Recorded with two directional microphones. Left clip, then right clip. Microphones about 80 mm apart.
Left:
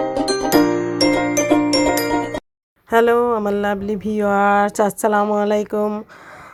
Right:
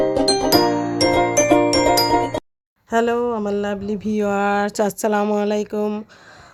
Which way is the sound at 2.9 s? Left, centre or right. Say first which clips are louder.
Left 4 dB; left.